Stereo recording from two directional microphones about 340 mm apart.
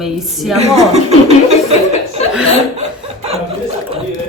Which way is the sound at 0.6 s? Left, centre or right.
Centre.